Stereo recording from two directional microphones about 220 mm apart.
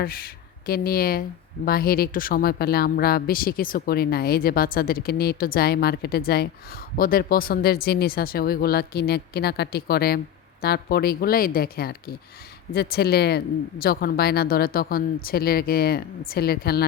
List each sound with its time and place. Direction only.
0.0 s a woman's voice: 40° left (ahead or behind)